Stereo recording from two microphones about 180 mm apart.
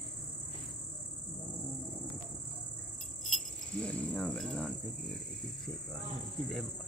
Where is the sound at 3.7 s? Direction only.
5° left (ahead or behind).